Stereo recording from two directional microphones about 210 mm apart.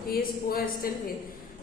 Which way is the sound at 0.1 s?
45° left (ahead or behind).